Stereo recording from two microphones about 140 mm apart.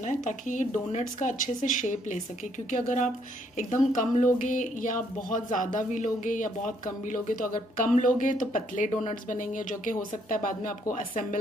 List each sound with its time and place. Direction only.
0.0 s speech: 60° left (ahead or behind); by 11.2 s 80° left